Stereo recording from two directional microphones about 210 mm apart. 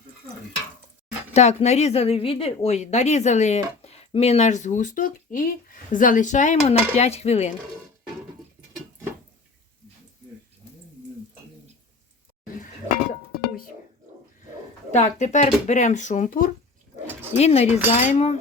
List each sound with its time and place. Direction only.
1.3 s a woman's voice: 30° left (ahead or behind)
14.9 s a woman's voice: 35° left (ahead or behind)